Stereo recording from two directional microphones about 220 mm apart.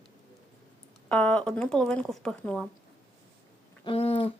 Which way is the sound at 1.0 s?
5° left (ahead or behind).